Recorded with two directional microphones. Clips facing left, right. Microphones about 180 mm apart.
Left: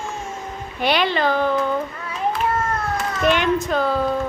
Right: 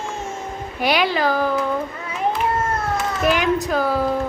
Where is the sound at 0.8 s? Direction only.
5° right (ahead or behind).